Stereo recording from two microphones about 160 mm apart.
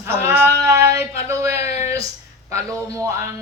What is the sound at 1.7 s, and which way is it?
Speech, 45° left (ahead or behind).